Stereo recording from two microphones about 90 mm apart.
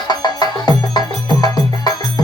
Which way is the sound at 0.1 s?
50° left (ahead or behind).